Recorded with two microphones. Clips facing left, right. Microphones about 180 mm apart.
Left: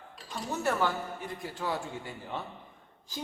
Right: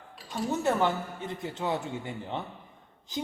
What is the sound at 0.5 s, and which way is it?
A man's voice, 20° right (ahead or behind).